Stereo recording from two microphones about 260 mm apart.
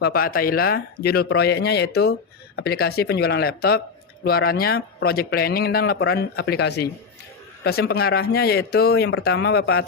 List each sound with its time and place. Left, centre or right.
0.0 s a man's voice: left